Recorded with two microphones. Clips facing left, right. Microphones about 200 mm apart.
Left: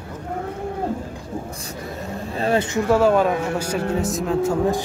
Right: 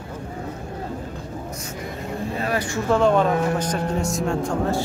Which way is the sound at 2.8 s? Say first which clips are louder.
Even; 5° left (ahead or behind).